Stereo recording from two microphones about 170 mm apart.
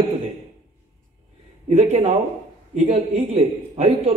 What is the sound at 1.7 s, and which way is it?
A man's voice, 35° right (ahead or behind).